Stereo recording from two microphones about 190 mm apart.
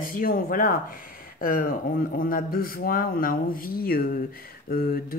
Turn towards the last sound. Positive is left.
turn(degrees=50)  # may be behind; listen again after turning